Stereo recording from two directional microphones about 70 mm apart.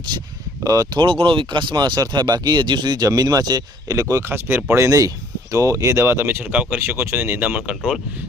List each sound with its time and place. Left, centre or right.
0.6 s speech: right
1.5 s speech: right
3.8 s speech: right
4.9 s speech: right
6.1 s speech: right
6.4 s speech: centre
6.7 s speech: right
7.7 s speech: centre